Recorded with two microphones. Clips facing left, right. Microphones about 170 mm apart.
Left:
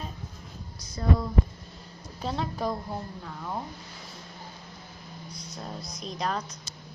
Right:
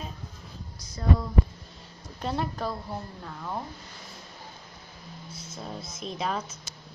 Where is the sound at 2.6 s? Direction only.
10° left (ahead or behind).